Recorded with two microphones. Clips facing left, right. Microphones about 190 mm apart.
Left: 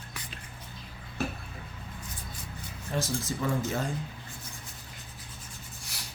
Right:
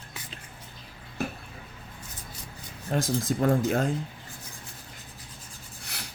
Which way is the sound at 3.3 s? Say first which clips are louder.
Right 7 dB; 55° right (ahead or behind).